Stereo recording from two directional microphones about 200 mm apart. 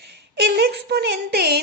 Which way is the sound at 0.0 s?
55° right (ahead or behind).